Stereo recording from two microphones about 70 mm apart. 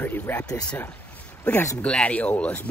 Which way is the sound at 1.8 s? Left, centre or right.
Centre.